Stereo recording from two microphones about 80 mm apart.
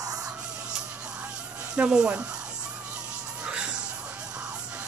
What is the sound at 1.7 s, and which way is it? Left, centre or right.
Speech, centre.